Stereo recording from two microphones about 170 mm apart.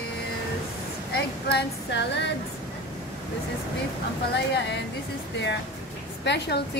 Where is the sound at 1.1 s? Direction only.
90° left.